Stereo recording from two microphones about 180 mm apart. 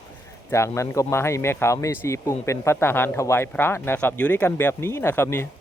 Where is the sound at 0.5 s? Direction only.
15° left (ahead or behind).